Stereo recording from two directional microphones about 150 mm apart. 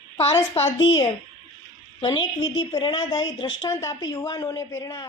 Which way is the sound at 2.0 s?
30° left (ahead or behind).